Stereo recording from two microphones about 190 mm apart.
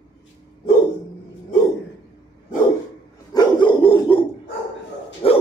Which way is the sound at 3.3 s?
25° left (ahead or behind).